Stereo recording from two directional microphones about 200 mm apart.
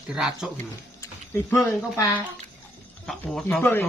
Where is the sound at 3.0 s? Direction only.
Centre (ahead or behind).